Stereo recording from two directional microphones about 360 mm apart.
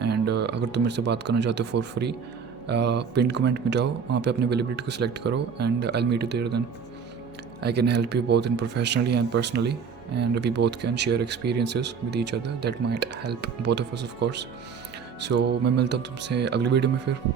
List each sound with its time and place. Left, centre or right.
0.0 s speech: right
7.6 s speech: right